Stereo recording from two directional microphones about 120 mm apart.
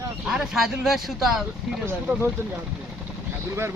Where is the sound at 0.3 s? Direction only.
5° right (ahead or behind).